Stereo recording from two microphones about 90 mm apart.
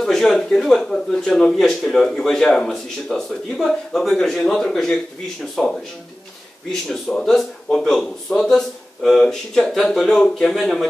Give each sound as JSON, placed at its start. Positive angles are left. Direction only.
{"t": 0.0, "sound": "speech", "side_deg": 5}